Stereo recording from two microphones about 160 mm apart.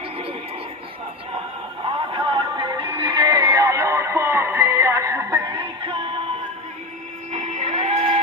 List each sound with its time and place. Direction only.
2.1 s music: 30° right (ahead or behind)
5.5 s music: 30° right (ahead or behind)
7.3 s music: 50° right (ahead or behind)